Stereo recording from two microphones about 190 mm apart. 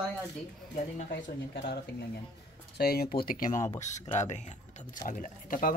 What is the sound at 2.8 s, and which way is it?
Speech, 55° left (ahead or behind).